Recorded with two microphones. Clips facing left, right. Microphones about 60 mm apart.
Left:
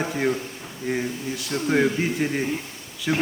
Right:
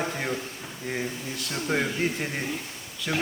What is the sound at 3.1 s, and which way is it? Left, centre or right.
Speech, centre.